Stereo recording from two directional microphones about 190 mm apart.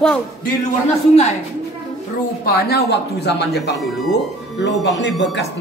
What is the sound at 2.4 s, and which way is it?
Speech, 55° left (ahead or behind).